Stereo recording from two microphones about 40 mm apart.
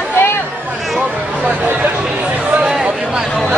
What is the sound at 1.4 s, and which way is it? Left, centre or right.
Chatter, right.